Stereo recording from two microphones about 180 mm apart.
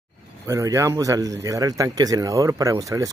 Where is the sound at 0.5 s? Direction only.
15° right (ahead or behind).